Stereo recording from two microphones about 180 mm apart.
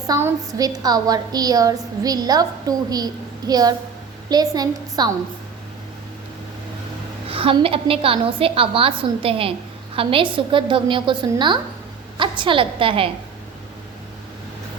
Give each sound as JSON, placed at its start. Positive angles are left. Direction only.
{"t": 0.1, "sound": "a woman's voice", "side_deg": -15}
{"t": 7.3, "sound": "a woman's voice", "side_deg": -30}